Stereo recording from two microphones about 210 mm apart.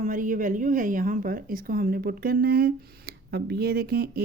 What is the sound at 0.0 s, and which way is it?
A woman's voice, 40° right (ahead or behind).